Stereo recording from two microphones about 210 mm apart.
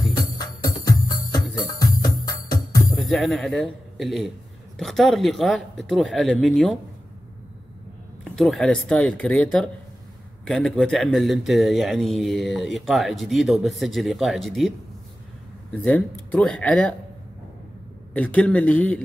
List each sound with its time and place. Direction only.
0.3 s music: 20° left (ahead or behind)
2.8 s speech: centre (ahead or behind)
8.2 s speech: centre (ahead or behind)
15.7 s speech: 5° left (ahead or behind)
18.1 s speech: 5° left (ahead or behind)